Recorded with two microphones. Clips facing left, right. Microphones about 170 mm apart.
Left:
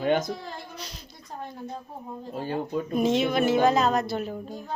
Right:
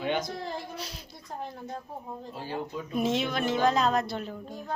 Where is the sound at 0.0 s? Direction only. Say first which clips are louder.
Left 6 dB; 45° left (ahead or behind).